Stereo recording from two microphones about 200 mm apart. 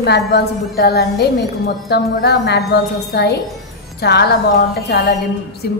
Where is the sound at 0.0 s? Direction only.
55° left (ahead or behind).